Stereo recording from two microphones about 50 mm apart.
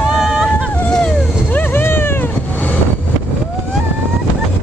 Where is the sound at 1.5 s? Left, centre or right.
Left.